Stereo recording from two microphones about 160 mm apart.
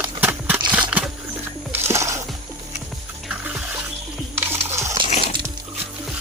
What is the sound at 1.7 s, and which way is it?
Music, 15° right (ahead or behind).